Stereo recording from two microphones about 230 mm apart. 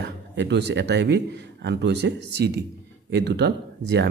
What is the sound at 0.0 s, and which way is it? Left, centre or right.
Speech, right.